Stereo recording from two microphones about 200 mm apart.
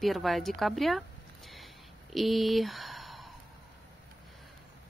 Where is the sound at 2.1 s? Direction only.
Centre (ahead or behind).